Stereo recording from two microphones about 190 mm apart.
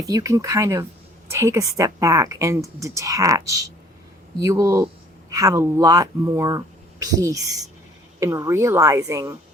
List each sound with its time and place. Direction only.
0.0 s a woman's voice: 20° right (ahead or behind)